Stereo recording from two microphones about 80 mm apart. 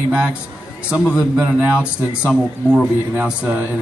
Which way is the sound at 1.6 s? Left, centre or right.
Centre.